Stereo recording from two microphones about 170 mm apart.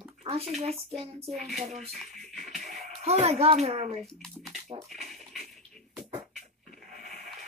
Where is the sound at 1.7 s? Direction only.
35° right (ahead or behind).